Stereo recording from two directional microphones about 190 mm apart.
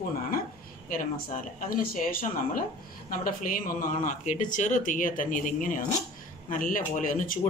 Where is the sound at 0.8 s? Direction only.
45° left (ahead or behind).